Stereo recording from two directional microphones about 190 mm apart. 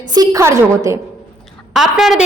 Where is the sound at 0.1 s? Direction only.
20° right (ahead or behind).